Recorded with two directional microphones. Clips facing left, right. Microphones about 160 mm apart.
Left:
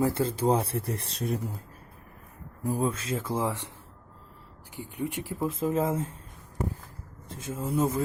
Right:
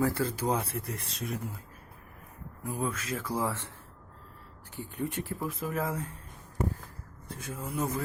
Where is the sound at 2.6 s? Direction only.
35° left (ahead or behind); by 3.7 s 15° left (ahead or behind).